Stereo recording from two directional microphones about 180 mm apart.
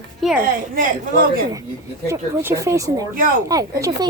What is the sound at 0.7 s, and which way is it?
Speech, 45° right (ahead or behind).